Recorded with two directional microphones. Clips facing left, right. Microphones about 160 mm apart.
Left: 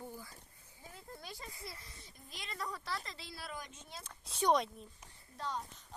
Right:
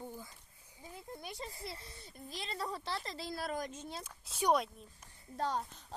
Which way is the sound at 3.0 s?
40° right (ahead or behind).